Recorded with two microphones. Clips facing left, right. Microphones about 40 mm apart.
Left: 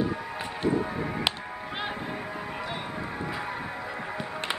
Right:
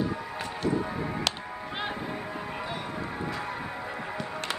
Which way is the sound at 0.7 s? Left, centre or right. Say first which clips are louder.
Left 2 dB; centre.